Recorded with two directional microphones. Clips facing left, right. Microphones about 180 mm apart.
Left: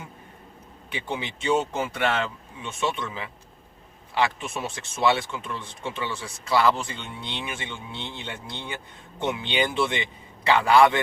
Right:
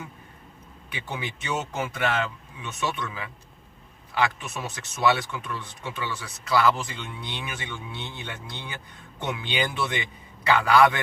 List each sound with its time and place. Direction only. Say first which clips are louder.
0.9 s speech: left 3 dB; 25° left (ahead or behind)